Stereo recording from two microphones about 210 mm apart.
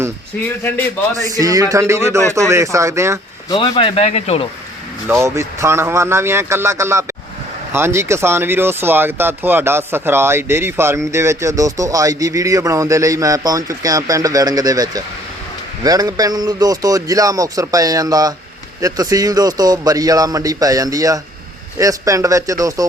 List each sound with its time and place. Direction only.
0.4 s a man's voice: 10° left (ahead or behind)
1.4 s speech: 15° right (ahead or behind)
3.5 s speech: 25° left (ahead or behind)
5.2 s speech: 15° right (ahead or behind)